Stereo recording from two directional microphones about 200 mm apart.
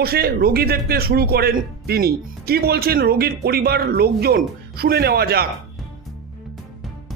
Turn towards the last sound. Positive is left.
turn(degrees=-50)  # may be behind; listen again after turning